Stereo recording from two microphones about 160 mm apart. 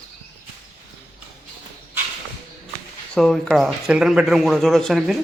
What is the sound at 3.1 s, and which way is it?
Speech, 5° left (ahead or behind).